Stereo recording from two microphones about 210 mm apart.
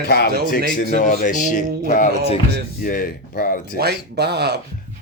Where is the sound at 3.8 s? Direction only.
50° right (ahead or behind).